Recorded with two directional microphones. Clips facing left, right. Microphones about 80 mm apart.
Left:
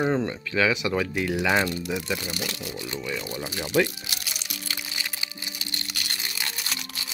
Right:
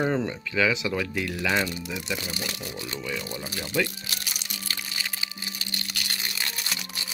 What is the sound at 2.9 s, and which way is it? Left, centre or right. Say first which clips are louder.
Speech: left 1 dB; centre.